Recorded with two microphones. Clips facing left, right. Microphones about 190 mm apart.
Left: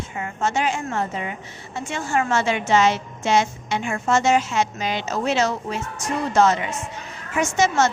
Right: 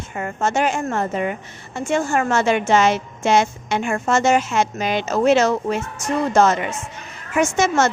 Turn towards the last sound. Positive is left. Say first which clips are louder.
# right 2 dB
turn(degrees=-50)  # may be behind; listen again after turning